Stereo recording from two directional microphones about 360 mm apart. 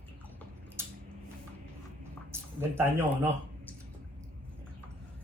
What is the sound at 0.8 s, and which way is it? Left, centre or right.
Squish, centre.